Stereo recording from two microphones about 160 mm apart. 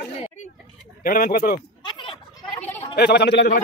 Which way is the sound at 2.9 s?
90° left.